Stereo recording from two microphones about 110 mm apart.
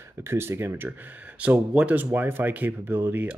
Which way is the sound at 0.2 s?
20° right (ahead or behind).